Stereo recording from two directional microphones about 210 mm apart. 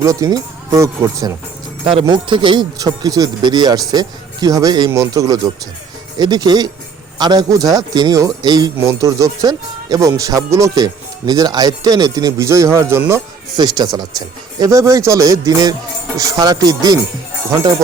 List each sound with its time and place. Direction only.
0.0 s speech: 15° right (ahead or behind)